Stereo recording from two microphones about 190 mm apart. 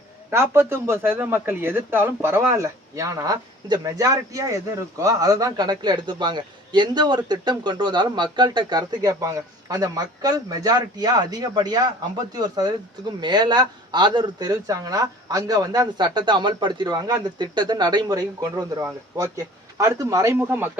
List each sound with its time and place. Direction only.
0.3 s speech: 10° right (ahead or behind)